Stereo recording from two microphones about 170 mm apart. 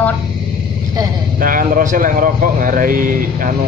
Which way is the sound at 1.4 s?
55° right (ahead or behind).